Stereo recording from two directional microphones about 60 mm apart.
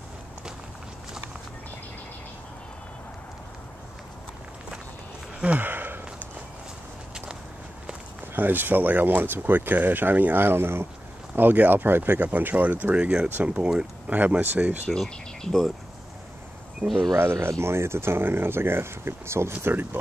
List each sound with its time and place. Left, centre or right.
5.6 s a sound: right
8.4 s speech: right; by 14.1 s centre
14.1 s speech: right
15.0 s speech: centre
17.2 s speech: right